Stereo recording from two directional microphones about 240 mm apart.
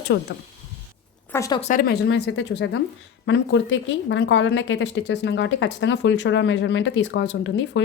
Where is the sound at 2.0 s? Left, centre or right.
Left.